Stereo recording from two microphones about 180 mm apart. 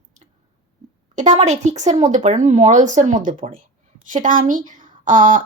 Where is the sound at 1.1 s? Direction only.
40° right (ahead or behind).